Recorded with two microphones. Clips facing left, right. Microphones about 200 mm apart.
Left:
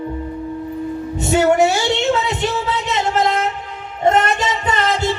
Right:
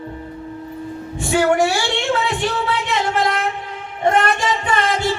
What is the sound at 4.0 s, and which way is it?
Child singing, 25° left (ahead or behind).